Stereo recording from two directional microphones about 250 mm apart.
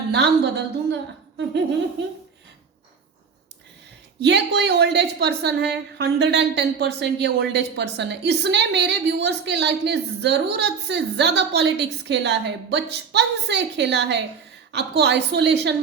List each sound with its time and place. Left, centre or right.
0.1 s a woman's voice: right
4.2 s a woman's voice: right